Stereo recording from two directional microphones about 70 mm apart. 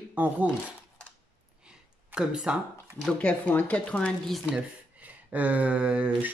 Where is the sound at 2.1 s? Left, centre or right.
Centre.